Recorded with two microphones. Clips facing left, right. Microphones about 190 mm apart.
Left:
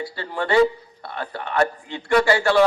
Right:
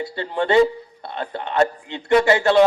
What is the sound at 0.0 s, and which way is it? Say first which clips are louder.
A man's voice: right 4 dB; 20° right (ahead or behind).